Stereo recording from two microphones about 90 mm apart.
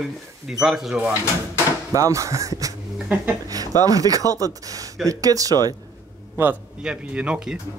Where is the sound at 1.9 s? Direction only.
35° right (ahead or behind).